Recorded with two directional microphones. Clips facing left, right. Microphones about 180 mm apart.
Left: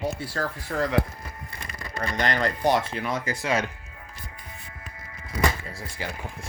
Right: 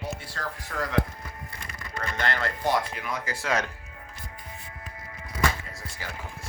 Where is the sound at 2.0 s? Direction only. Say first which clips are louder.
Left 4 dB; 15° left (ahead or behind).